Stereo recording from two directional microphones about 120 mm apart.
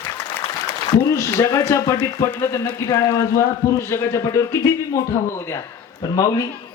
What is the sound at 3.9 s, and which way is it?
Speech, 25° left (ahead or behind).